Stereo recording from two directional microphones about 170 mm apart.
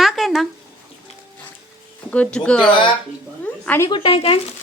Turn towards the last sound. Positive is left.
turn(degrees=30)  # may be behind; listen again after turning